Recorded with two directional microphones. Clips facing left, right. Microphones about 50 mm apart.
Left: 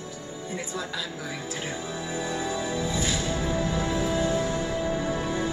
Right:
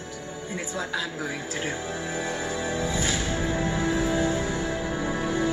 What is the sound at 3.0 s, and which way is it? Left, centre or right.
Music, right.